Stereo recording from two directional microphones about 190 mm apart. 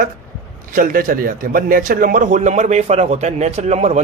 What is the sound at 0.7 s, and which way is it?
A man's voice, 45° right (ahead or behind).